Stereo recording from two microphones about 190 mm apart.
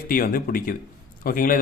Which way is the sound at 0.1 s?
50° left (ahead or behind).